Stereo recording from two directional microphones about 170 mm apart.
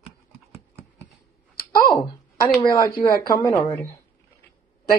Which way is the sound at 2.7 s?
20° left (ahead or behind).